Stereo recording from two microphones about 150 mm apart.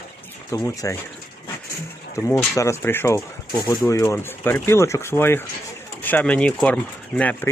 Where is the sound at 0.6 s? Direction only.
20° left (ahead or behind).